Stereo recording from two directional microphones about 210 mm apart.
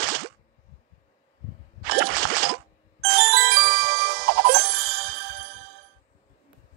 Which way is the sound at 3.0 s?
45° right (ahead or behind).